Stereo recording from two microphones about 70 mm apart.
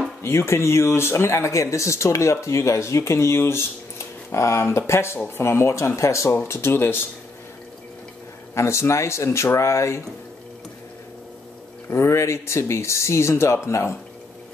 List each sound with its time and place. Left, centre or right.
0.2 s speech: left
8.5 s speech: left
11.9 s speech: left